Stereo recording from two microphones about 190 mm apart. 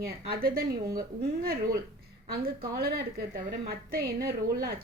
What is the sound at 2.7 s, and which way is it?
A woman's voice, 55° right (ahead or behind).